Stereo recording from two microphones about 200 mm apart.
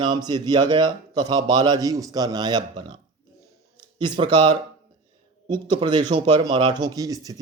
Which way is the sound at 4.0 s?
20° right (ahead or behind).